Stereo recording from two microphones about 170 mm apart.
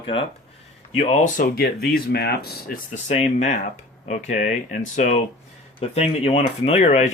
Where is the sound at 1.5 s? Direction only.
70° left (ahead or behind).